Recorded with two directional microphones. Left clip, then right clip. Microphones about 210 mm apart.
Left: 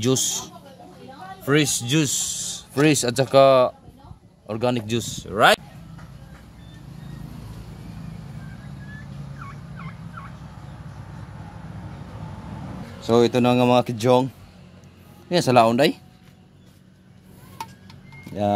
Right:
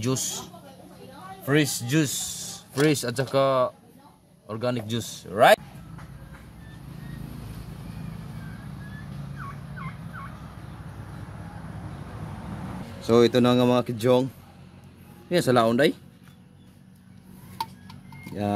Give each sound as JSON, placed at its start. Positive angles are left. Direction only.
{"t": 0.0, "sound": "speech", "side_deg": 35}
{"t": 13.0, "sound": "speech", "side_deg": 5}
{"t": 15.2, "sound": "speech", "side_deg": 15}